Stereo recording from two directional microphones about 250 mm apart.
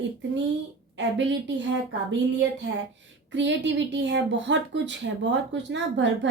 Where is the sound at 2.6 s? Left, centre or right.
Right.